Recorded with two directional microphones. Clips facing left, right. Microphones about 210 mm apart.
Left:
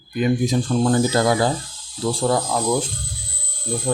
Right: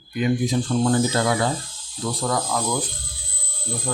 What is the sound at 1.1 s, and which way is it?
Speech, 35° left (ahead or behind).